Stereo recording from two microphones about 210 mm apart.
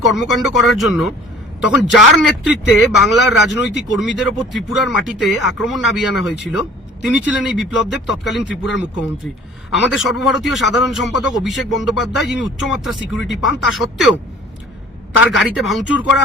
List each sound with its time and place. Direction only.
0.0 s speech: centre (ahead or behind)
9.9 s speech: centre (ahead or behind)
15.2 s speech: 5° right (ahead or behind)